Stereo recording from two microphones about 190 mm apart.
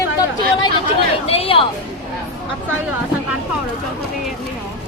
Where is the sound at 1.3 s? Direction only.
30° left (ahead or behind).